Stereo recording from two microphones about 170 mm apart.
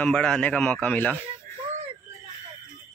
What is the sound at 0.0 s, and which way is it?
A man's voice, 5° left (ahead or behind).